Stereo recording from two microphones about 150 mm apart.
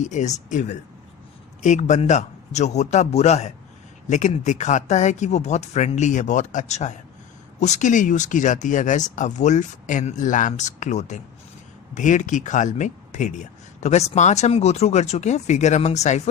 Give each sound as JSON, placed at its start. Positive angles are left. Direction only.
{"t": 0.0, "sound": "speech", "side_deg": 55}